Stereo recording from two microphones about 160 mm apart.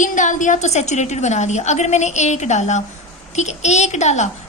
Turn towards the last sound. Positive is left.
turn(degrees=45)  # may be behind; listen again after turning